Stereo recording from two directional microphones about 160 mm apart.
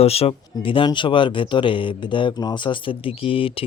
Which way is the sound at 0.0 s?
40° left (ahead or behind).